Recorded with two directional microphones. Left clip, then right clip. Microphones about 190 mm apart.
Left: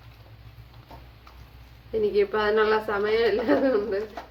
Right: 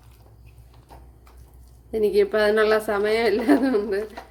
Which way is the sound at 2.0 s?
45° right (ahead or behind).